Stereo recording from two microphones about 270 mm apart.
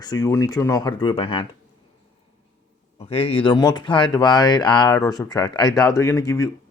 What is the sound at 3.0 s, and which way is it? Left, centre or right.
Speech, left.